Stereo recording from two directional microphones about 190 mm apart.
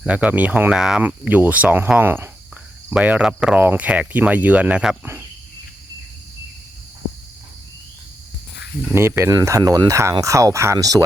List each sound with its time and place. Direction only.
0.0 s speech: 5° right (ahead or behind)
8.9 s speech: 10° right (ahead or behind)